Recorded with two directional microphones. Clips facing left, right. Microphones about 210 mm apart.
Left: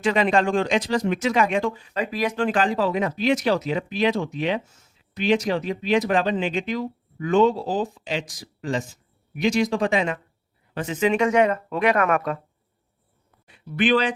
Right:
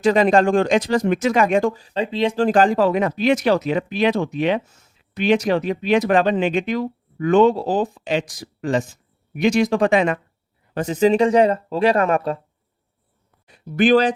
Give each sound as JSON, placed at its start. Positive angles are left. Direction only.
{"t": 0.0, "sound": "speech", "side_deg": -40}
{"t": 10.8, "sound": "speech", "side_deg": -40}
{"t": 13.5, "sound": "speech", "side_deg": -40}